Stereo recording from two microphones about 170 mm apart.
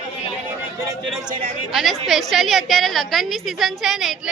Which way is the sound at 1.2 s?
30° right (ahead or behind).